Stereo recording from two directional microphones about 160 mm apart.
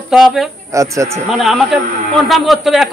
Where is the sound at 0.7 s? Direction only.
20° right (ahead or behind).